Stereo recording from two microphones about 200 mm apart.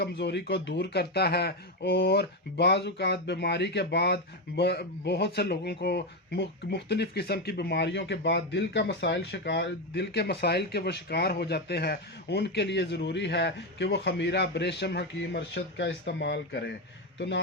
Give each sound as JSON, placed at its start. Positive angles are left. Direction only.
{"t": 0.0, "sound": "speech", "side_deg": 55}